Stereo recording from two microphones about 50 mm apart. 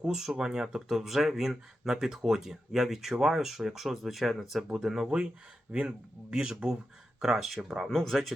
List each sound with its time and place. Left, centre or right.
0.0 s speech: centre
5.7 s speech: right
6.3 s speech: centre